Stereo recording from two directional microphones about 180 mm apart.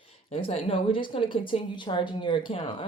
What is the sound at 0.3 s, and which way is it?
Speech, 35° left (ahead or behind).